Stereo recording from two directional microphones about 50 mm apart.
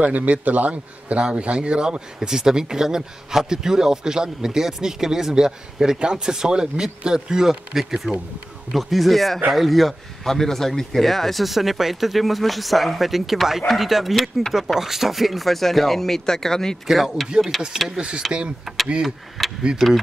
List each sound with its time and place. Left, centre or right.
0.0 s a man's voice: right; by 16.7 s centre
16.8 s a man's voice: centre
17.7 s a man's voice: centre
19.0 s a man's voice: centre